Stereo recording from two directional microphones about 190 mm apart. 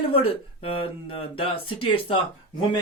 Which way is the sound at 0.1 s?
30° left (ahead or behind).